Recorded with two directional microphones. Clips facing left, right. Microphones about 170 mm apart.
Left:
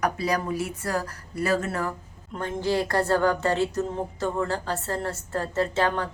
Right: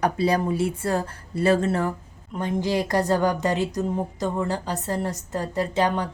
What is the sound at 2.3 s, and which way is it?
A woman's voice, 15° right (ahead or behind).